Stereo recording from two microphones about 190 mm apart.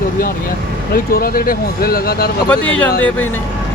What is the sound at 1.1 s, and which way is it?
Speech, 50° left (ahead or behind).